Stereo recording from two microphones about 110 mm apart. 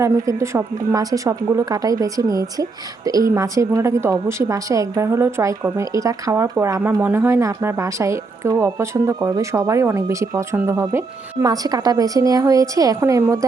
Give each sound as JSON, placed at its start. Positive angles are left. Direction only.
{"t": 0.0, "sound": "speech", "side_deg": -25}
{"t": 11.4, "sound": "a woman's voice", "side_deg": -35}